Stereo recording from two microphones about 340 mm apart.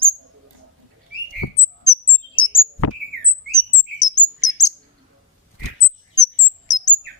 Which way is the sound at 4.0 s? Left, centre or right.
Left.